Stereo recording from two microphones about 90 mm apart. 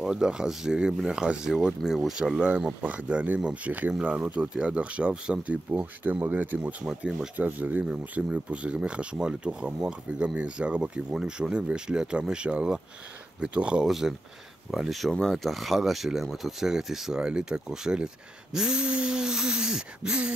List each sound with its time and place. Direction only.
0.0 s speech: 5° right (ahead or behind)
2.8 s speech: 15° right (ahead or behind)
7.3 s speech: 20° right (ahead or behind)